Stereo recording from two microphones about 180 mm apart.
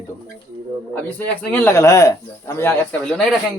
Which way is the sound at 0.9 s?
10° left (ahead or behind).